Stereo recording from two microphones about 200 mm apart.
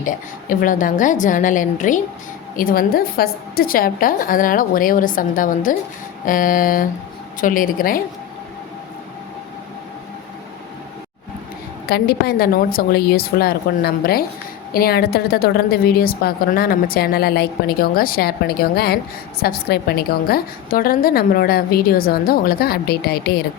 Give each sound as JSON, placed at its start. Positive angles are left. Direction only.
{"t": 0.0, "sound": "a woman's voice", "side_deg": 45}
{"t": 11.9, "sound": "a woman's voice", "side_deg": 50}